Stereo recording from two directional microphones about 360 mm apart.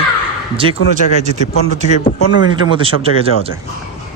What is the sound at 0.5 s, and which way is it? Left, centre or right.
Speech, centre.